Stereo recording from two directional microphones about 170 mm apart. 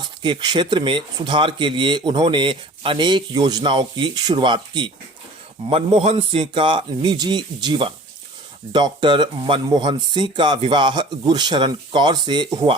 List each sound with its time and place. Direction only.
0.2 s speech: 25° right (ahead or behind)